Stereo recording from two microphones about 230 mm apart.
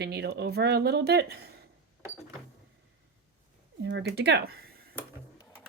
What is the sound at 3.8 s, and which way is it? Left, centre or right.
Speech, right.